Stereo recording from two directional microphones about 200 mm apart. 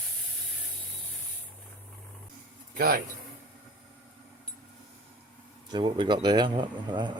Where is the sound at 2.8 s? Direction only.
50° right (ahead or behind).